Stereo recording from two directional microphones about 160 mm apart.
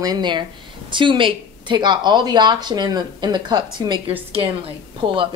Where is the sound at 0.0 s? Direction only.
25° right (ahead or behind).